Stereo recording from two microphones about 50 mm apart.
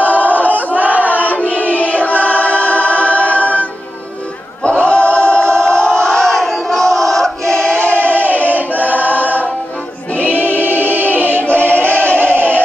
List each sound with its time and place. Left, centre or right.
0.2 s crowd: right
0.7 s a sound: right
1.5 s choir: left
4.6 s choir: left
5.6 s battle cry: centre
7.6 s choir: left
8.0 s music: right
8.5 s choir: right
10.2 s music: right